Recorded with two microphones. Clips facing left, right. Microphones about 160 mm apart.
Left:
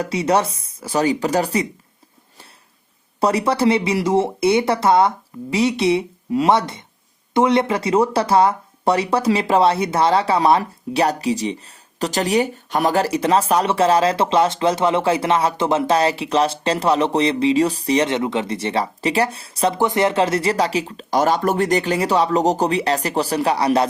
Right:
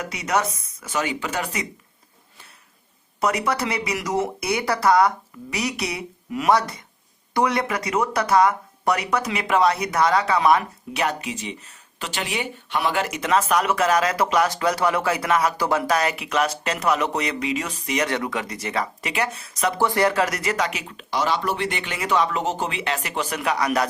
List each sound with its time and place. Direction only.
0.0 s speech: 30° left (ahead or behind)
3.2 s speech: 30° left (ahead or behind)
21.2 s speech: 50° left (ahead or behind); by 23.9 s 30° left (ahead or behind)